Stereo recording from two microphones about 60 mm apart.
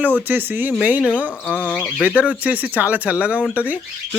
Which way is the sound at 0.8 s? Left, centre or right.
Right.